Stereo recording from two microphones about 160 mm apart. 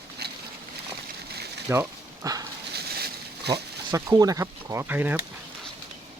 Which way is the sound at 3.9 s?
20° right (ahead or behind).